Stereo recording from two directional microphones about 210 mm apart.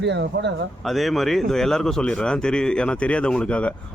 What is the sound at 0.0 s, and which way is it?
Speech, 55° right (ahead or behind).